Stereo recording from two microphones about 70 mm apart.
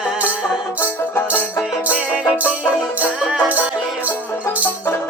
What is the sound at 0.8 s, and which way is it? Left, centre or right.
Banjo, left.